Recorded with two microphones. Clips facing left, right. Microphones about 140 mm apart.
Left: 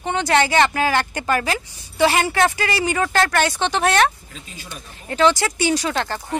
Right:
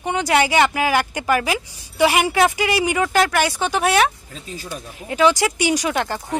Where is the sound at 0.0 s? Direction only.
10° right (ahead or behind).